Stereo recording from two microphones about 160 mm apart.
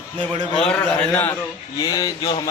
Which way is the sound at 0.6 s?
5° left (ahead or behind).